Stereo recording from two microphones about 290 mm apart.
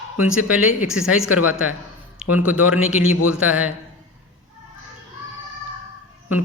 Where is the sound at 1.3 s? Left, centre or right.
Left.